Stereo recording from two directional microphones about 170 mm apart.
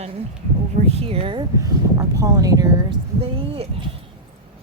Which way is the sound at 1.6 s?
20° right (ahead or behind).